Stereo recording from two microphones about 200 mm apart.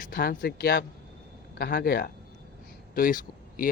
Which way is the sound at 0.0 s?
45° left (ahead or behind).